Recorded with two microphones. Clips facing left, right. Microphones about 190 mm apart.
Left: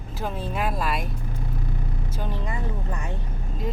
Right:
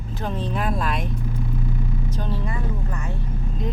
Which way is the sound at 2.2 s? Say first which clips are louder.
Even; 15° left (ahead or behind).